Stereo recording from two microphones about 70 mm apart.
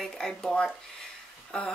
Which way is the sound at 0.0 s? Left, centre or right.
Centre.